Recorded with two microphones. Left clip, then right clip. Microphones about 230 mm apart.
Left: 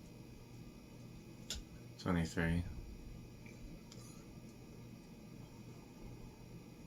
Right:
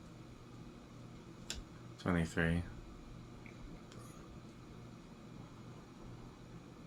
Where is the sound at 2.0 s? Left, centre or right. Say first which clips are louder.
Right 3 dB; right.